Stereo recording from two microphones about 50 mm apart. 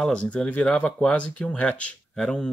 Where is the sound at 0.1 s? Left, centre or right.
Centre.